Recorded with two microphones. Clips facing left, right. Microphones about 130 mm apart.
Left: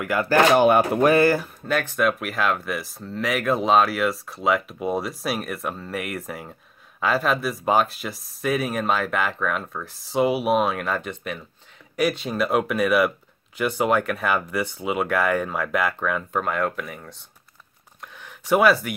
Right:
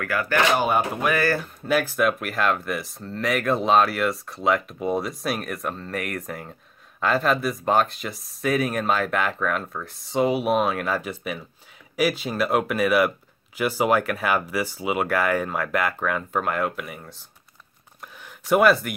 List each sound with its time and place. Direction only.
0.0 s speech: 25° left (ahead or behind)
0.6 s speech: 60° left (ahead or behind)
1.7 s speech: 5° right (ahead or behind)
18.0 s a sound: centre (ahead or behind)